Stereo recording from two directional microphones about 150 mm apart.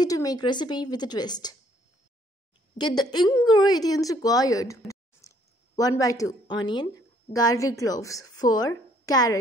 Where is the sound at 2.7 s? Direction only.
30° left (ahead or behind).